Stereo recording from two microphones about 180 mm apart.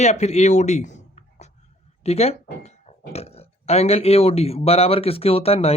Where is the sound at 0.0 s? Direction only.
40° left (ahead or behind).